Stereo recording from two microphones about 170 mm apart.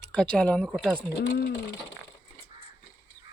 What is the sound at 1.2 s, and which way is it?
Speech, 90° left.